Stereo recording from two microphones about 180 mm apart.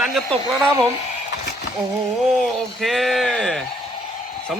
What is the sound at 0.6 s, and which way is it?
Speech, 20° right (ahead or behind).